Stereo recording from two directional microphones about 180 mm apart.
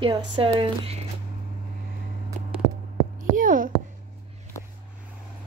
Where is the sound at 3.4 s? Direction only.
50° right (ahead or behind).